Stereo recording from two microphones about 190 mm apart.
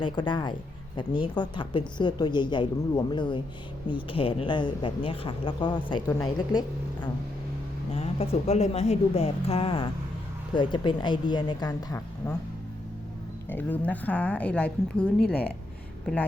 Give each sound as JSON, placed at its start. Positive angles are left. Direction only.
{"t": 0.0, "sound": "a woman's voice", "side_deg": 25}
{"t": 7.9, "sound": "a woman's voice", "side_deg": 30}
{"t": 13.5, "sound": "a woman's voice", "side_deg": 10}